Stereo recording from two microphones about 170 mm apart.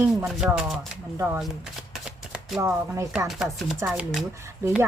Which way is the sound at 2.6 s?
15° right (ahead or behind).